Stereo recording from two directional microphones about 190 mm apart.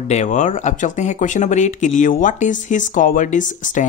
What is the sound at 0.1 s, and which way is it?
Speech, 40° left (ahead or behind).